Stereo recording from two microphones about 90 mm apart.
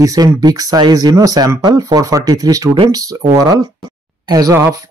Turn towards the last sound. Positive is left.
turn(degrees=-35)  # may be behind; listen again after turning